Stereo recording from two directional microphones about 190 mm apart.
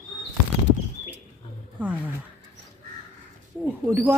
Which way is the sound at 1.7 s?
5° right (ahead or behind).